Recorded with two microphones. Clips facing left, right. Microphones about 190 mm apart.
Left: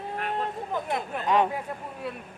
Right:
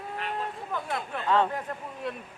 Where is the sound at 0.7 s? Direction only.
20° left (ahead or behind).